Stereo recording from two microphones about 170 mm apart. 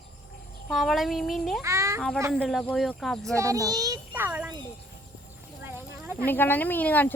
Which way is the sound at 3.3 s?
20° right (ahead or behind).